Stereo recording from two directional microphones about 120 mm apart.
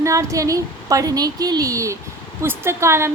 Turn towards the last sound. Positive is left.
turn(degrees=-20)  # may be behind; listen again after turning